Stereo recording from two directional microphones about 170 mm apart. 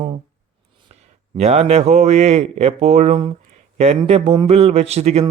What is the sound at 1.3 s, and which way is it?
Speech, 40° right (ahead or behind).